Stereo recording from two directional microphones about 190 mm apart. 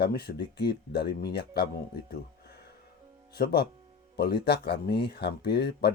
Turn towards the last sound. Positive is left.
turn(degrees=60)  # may be behind; listen again after turning